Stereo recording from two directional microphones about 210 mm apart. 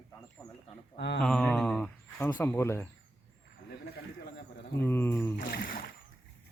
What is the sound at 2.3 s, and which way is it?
Speech, 10° left (ahead or behind).